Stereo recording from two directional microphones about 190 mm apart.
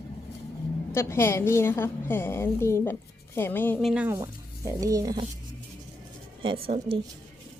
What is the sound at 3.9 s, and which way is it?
Speech, 10° right (ahead or behind).